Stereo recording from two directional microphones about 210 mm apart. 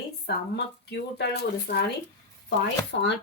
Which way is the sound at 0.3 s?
55° left (ahead or behind).